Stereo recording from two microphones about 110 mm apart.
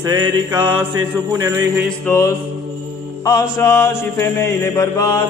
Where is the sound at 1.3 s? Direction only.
30° right (ahead or behind).